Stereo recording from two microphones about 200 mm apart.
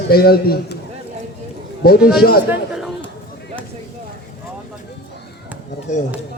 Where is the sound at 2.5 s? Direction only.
Centre (ahead or behind).